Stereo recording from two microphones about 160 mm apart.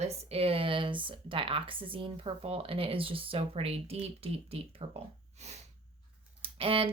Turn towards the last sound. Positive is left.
turn(degrees=-35)  # may be behind; listen again after turning